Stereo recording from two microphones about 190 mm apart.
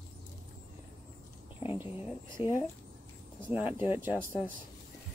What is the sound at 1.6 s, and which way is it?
Speech, 10° right (ahead or behind).